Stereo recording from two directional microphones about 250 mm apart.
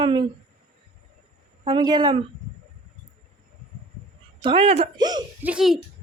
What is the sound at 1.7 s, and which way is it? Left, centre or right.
Speech, centre.